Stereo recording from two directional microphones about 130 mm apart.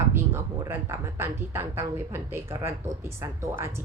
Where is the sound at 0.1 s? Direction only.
20° right (ahead or behind).